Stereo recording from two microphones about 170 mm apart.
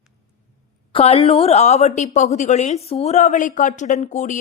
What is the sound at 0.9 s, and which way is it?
A woman's voice, 35° left (ahead or behind).